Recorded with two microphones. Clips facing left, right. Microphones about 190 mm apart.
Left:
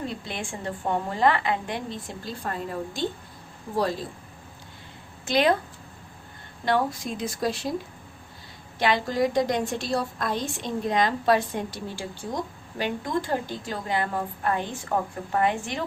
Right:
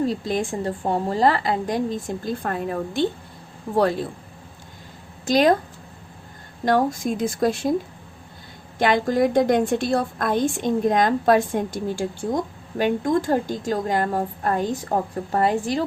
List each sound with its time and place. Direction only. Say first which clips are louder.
0.0 s a woman's voice: right 10 dB; 40° right (ahead or behind); by 3.1 s 60° right (ahead or behind)
5.2 s speech: right 5 dB; 40° right (ahead or behind)
6.7 s a woman's voice: right 5 dB; 45° right (ahead or behind)
8.8 s a woman's voice: right 5 dB; 50° right (ahead or behind)